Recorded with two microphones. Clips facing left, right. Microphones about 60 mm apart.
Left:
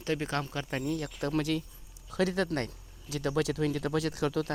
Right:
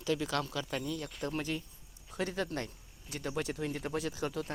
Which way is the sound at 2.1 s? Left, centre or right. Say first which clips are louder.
Left 6 dB; left.